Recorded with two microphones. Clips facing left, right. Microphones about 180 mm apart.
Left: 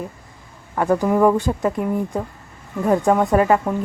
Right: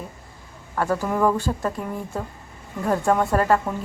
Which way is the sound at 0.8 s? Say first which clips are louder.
Left 5 dB; 15° left (ahead or behind).